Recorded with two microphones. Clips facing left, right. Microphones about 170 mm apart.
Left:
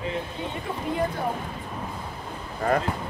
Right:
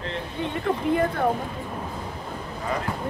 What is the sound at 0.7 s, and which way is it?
Speech, 55° right (ahead or behind).